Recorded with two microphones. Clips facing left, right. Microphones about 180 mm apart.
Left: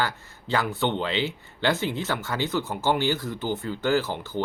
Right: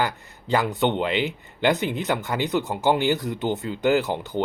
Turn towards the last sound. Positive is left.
turn(degrees=-20)  # may be behind; listen again after turning